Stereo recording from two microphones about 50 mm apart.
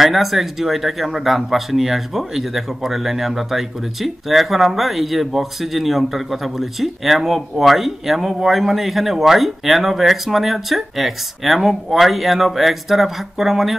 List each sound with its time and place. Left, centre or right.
0.0 s speech: centre